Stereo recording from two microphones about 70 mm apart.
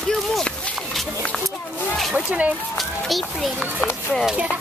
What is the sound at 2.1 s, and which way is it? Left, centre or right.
Speech, centre.